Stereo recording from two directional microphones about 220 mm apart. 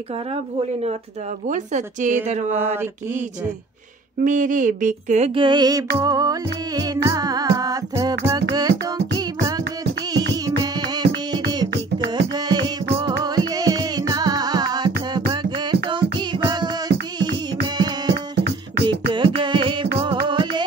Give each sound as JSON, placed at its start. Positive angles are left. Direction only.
{"t": 1.5, "sound": "speech", "side_deg": -35}
{"t": 2.6, "sound": "music", "side_deg": -10}
{"t": 4.2, "sound": "speech", "side_deg": -35}
{"t": 5.9, "sound": "music", "side_deg": -15}
{"t": 12.1, "sound": "music", "side_deg": -20}
{"t": 18.1, "sound": "beatboxing", "side_deg": -50}
{"t": 18.9, "sound": "music", "side_deg": -20}